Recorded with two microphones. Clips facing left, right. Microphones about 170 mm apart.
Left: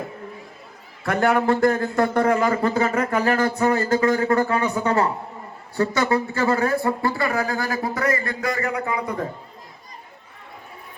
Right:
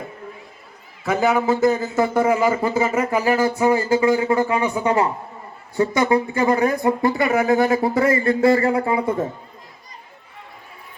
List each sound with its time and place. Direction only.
1.0 s speech: 5° right (ahead or behind); by 9.2 s 25° right (ahead or behind)